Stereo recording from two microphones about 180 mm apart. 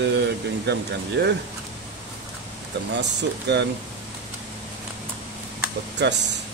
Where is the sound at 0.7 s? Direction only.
70° right (ahead or behind).